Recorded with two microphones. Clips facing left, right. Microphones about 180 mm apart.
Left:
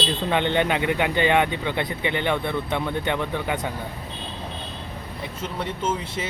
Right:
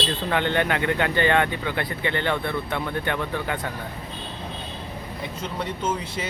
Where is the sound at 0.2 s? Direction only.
20° left (ahead or behind).